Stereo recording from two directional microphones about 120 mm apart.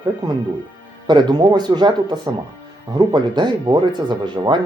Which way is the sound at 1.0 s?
35° right (ahead or behind).